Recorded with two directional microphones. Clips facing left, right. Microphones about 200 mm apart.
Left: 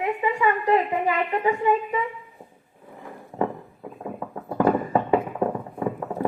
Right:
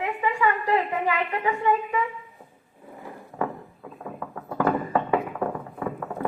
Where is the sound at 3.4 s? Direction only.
20° left (ahead or behind).